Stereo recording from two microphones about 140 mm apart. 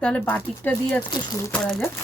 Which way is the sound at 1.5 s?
10° left (ahead or behind).